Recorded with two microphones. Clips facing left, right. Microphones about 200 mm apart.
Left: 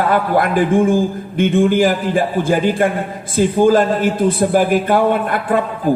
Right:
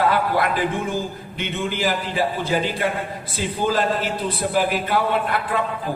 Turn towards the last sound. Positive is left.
turn(degrees=50)  # may be behind; listen again after turning